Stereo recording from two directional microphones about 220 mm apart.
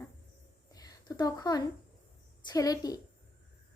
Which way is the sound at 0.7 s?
15° left (ahead or behind).